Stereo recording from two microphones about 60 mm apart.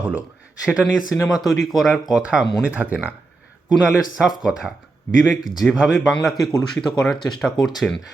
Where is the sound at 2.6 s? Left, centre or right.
Right.